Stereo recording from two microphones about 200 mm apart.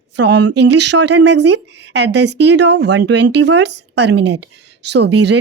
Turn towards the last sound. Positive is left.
turn(degrees=-60)  # may be behind; listen again after turning